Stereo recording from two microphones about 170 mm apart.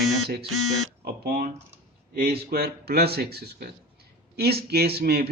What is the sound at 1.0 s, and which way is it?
Speech, 65° right (ahead or behind).